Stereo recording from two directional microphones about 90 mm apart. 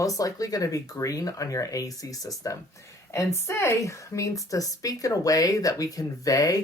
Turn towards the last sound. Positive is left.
turn(degrees=40)  # may be behind; listen again after turning